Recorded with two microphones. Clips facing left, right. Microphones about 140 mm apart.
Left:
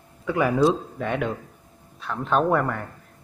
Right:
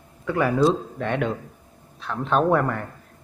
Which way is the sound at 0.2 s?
10° left (ahead or behind).